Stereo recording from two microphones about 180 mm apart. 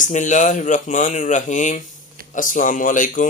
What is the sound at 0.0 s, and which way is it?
Speech, 45° left (ahead or behind).